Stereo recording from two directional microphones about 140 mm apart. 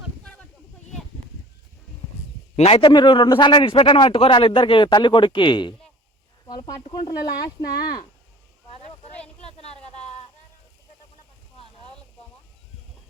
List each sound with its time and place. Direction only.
2.6 s a man's voice: 50° left (ahead or behind)
2.8 s a man's voice: 35° left (ahead or behind)
9.4 s a sound: 45° left (ahead or behind)